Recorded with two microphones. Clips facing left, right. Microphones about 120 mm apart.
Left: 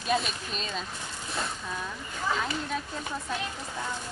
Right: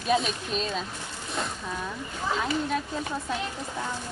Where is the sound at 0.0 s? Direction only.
Centre (ahead or behind).